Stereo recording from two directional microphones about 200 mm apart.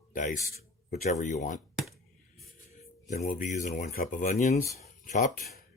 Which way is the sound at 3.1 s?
40° left (ahead or behind).